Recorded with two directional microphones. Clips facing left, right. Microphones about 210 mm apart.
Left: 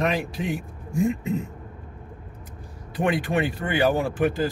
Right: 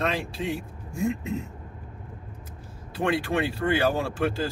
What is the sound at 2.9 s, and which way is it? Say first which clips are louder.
Speech: left 2 dB; 15° left (ahead or behind).